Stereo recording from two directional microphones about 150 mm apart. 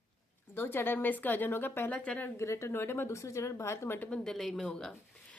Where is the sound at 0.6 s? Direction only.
15° left (ahead or behind).